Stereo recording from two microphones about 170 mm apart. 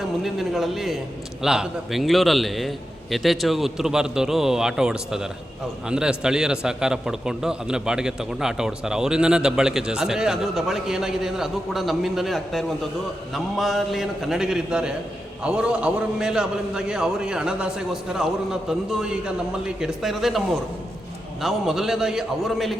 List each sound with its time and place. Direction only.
0.2 s a man's voice: centre (ahead or behind)
21.4 s a man's voice: centre (ahead or behind)